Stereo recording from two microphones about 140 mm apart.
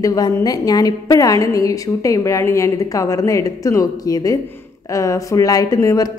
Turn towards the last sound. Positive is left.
turn(degrees=25)  # may be behind; listen again after turning